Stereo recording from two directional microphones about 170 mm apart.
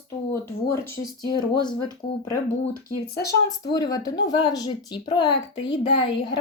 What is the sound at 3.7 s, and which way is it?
Speech, 25° left (ahead or behind).